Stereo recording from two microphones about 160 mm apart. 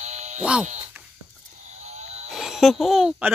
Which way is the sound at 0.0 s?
45° right (ahead or behind).